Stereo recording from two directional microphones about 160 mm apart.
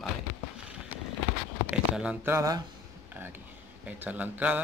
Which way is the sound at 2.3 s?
25° right (ahead or behind).